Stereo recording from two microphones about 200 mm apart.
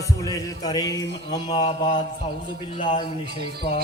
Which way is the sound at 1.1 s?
25° left (ahead or behind).